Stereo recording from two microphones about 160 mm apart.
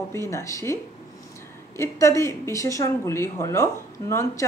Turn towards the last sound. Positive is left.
turn(degrees=20)  # may be behind; listen again after turning